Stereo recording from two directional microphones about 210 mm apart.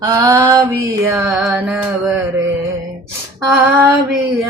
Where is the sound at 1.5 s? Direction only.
5° right (ahead or behind).